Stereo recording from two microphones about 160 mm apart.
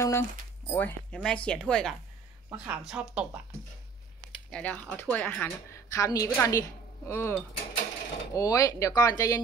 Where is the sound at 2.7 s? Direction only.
5° right (ahead or behind).